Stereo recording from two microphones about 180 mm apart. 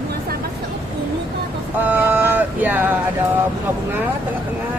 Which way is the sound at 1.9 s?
10° right (ahead or behind).